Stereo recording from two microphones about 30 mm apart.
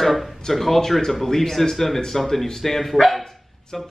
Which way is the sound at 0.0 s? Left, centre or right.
Centre.